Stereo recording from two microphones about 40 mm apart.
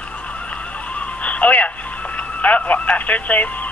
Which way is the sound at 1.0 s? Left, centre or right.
Left.